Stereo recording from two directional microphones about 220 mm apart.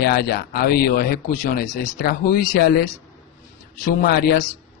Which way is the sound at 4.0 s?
45° left (ahead or behind).